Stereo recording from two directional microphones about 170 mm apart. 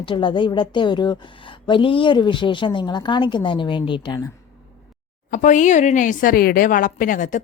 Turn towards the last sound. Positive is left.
turn(degrees=50)  # may be behind; listen again after turning